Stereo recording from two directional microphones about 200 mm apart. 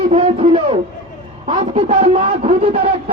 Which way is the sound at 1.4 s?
35° right (ahead or behind).